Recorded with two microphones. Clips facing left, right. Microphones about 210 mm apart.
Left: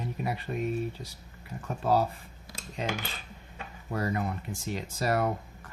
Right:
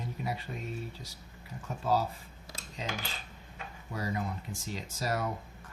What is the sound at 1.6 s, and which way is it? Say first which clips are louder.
Speech: left 4 dB; 60° left (ahead or behind).